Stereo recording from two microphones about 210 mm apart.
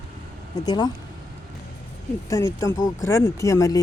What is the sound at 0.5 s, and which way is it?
Speech, 20° left (ahead or behind).